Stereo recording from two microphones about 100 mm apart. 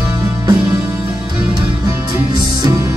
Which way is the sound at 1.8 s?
40° right (ahead or behind).